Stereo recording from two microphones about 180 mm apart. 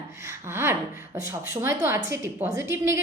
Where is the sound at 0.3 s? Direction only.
15° right (ahead or behind).